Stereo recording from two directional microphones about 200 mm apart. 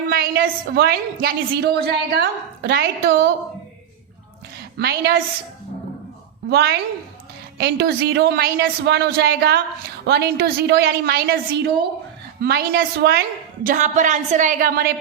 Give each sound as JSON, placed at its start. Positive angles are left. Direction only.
{"t": 0.1, "sound": "a woman's voice", "side_deg": -50}
{"t": 4.8, "sound": "a woman's voice", "side_deg": -55}
{"t": 6.5, "sound": "a woman's voice", "side_deg": -55}
{"t": 13.7, "sound": "a woman's voice", "side_deg": -40}